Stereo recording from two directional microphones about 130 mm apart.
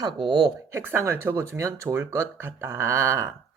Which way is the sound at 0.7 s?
20° right (ahead or behind).